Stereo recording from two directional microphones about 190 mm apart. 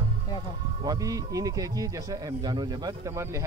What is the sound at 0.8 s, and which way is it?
Speech, 15° right (ahead or behind).